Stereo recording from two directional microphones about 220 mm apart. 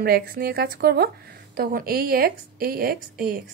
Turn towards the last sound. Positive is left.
turn(degrees=-45)  # may be behind; listen again after turning